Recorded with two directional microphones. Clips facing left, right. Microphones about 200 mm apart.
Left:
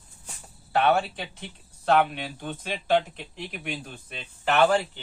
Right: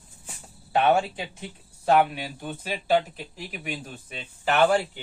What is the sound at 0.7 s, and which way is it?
Speech, 10° right (ahead or behind).